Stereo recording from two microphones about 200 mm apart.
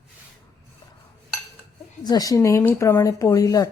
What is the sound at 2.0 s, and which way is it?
Speech, 20° left (ahead or behind).